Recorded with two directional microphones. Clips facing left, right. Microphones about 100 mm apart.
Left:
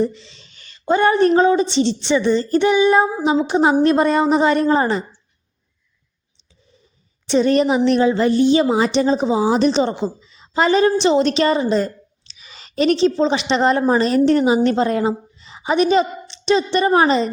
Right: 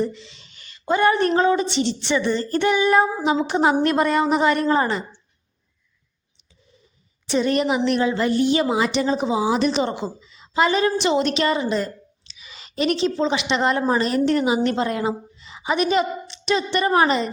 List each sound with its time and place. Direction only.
0.0 s a woman's voice: 30° left (ahead or behind)
7.3 s a woman's voice: 30° left (ahead or behind)